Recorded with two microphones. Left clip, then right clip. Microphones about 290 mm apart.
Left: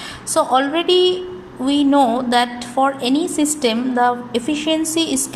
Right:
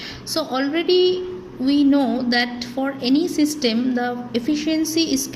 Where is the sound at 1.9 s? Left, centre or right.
Left.